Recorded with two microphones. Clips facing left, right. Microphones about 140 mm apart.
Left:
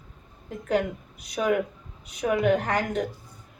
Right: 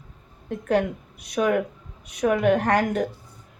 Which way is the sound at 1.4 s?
60° right (ahead or behind).